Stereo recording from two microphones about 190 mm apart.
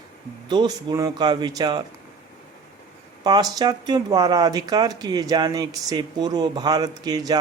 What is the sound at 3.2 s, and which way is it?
Speech, 20° right (ahead or behind).